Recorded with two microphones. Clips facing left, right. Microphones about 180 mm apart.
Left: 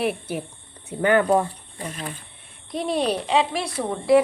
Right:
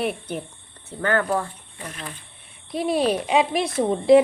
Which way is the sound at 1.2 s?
30° left (ahead or behind).